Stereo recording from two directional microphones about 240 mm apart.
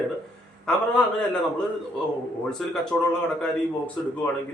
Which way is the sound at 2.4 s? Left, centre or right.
Centre.